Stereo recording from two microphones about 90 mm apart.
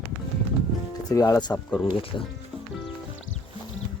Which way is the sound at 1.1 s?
40° left (ahead or behind).